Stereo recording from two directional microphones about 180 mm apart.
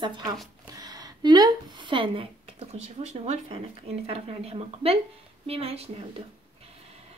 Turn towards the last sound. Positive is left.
turn(degrees=-35)  # may be behind; listen again after turning